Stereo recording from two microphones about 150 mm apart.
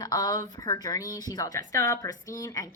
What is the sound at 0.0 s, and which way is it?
Speech, 25° left (ahead or behind).